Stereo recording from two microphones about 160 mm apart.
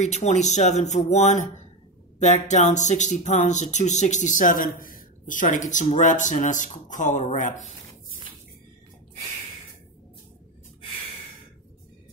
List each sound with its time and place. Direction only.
0.0 s speech: 45° left (ahead or behind)